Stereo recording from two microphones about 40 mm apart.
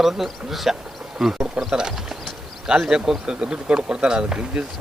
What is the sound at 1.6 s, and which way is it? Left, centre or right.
Speech, centre.